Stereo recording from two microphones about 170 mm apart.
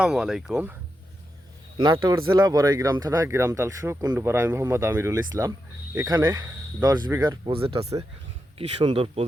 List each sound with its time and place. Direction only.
0.0 s speech: 5° right (ahead or behind)
1.8 s speech: 25° right (ahead or behind)
6.8 s speech: 25° right (ahead or behind)